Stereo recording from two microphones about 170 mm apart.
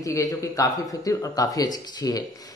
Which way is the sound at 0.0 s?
20° left (ahead or behind).